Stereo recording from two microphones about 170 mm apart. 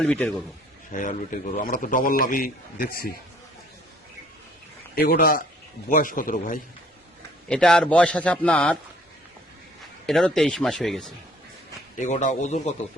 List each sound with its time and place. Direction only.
0.0 s speech: 5° left (ahead or behind)
0.9 s a man's voice: 50° left (ahead or behind)
4.9 s a man's voice: 60° left (ahead or behind)
7.4 s a man's voice: 5° left (ahead or behind)
10.1 s speech: centre (ahead or behind)
11.9 s a man's voice: 45° left (ahead or behind)